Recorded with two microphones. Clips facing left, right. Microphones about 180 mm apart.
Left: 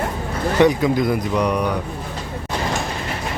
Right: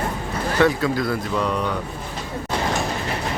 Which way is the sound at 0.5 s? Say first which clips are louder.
Left 4 dB; 20° left (ahead or behind).